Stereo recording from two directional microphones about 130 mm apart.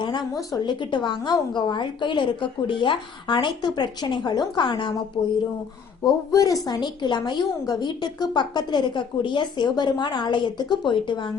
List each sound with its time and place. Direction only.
0.0 s a woman's voice: 35° left (ahead or behind)
6.1 s a woman's voice: 25° left (ahead or behind)